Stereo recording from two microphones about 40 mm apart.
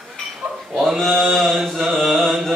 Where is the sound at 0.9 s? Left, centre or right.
Centre.